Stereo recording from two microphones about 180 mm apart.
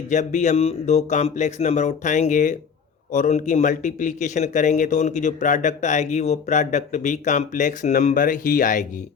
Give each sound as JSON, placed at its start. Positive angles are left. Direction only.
{"t": 0.1, "sound": "speech", "side_deg": 45}